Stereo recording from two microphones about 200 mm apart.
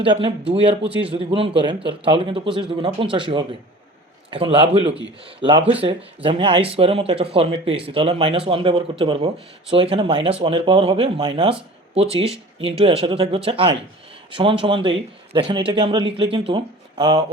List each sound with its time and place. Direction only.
0.0 s speech: 25° right (ahead or behind)